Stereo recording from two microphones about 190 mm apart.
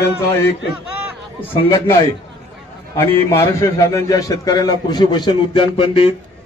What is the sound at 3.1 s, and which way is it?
A man's voice, 15° left (ahead or behind).